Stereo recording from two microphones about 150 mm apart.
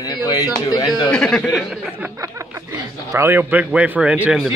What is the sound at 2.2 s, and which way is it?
Speech, 20° right (ahead or behind).